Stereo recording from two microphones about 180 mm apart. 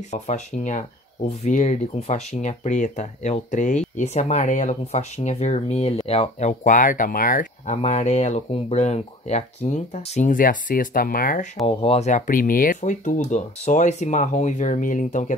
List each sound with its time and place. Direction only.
0.1 s speech: 40° left (ahead or behind)
11.6 s speech: 35° left (ahead or behind)